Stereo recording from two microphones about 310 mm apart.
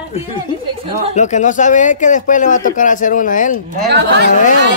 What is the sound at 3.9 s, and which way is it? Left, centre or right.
Speech, right.